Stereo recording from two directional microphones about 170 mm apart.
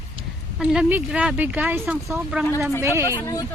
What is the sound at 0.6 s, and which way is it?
Speech, 5° right (ahead or behind).